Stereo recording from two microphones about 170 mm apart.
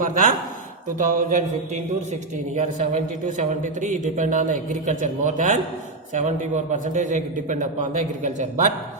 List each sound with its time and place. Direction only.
0.0 s speech: 50° right (ahead or behind)